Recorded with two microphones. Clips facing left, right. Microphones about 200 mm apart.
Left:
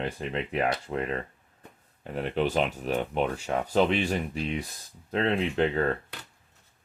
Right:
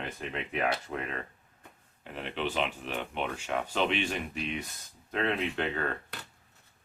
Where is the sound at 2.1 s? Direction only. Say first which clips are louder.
Left 6 dB; 40° left (ahead or behind).